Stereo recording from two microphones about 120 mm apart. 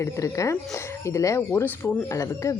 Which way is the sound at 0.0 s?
25° left (ahead or behind).